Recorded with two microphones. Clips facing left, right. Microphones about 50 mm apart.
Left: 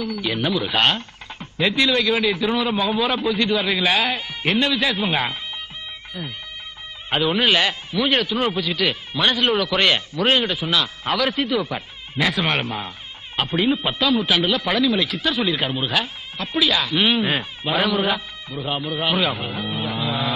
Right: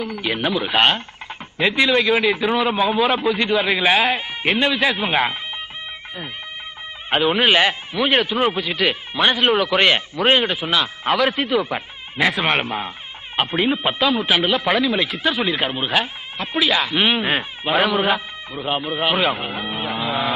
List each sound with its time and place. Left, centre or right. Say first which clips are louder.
0.0 s speech: right 1 dB; right
7.1 s speech: right 2 dB; right